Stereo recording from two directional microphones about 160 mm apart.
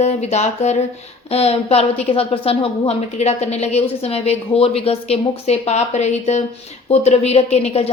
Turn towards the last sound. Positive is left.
turn(degrees=40)  # may be behind; listen again after turning